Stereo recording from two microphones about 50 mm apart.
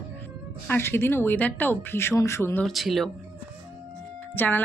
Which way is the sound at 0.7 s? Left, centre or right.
Left.